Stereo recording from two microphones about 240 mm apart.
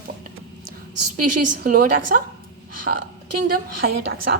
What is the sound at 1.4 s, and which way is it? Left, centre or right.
Speech, right.